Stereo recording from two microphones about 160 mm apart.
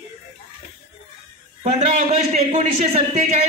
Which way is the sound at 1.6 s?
45° right (ahead or behind).